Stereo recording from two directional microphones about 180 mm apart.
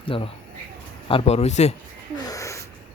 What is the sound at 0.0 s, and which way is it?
Speech, 30° left (ahead or behind).